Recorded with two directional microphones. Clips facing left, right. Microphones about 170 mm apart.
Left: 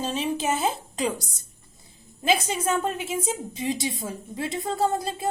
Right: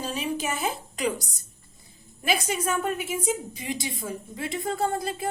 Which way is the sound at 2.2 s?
25° left (ahead or behind).